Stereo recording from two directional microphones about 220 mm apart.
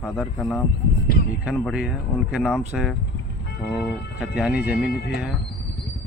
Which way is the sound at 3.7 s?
Centre (ahead or behind).